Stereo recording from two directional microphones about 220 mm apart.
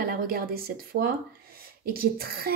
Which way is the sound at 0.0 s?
40° right (ahead or behind).